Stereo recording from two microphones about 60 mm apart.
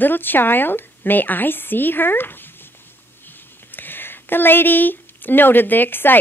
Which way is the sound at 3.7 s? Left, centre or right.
Left.